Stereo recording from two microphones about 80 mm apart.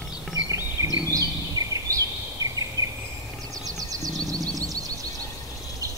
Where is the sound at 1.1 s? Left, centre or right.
Right.